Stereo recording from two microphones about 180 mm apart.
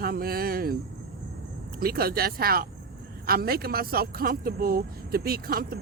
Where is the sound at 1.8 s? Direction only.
55° right (ahead or behind).